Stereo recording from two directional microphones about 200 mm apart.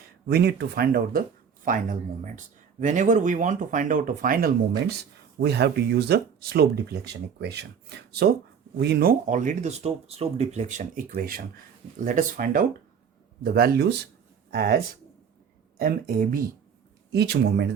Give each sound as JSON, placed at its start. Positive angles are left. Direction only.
{"t": 0.3, "sound": "speech", "side_deg": -55}
{"t": 15.8, "sound": "speech", "side_deg": -45}